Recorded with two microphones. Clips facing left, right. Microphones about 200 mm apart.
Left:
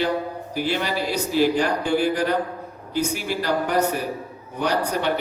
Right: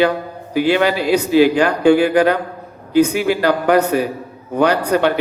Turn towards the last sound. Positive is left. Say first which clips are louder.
# right 9 dB
turn(degrees=-65)  # may be behind; listen again after turning